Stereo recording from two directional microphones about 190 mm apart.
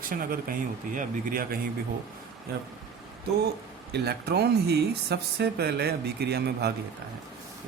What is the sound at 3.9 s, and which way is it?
Speech, 60° right (ahead or behind).